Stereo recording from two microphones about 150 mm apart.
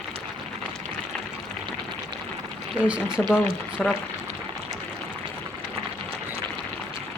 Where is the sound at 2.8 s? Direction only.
5° right (ahead or behind).